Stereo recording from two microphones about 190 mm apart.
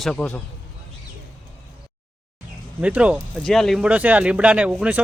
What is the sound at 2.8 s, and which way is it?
Speech, 5° right (ahead or behind).